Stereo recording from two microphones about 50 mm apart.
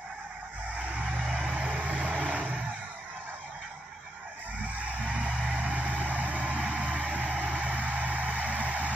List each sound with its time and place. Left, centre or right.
0.9 s music: right
1.4 s vehicle: centre
4.7 s music: right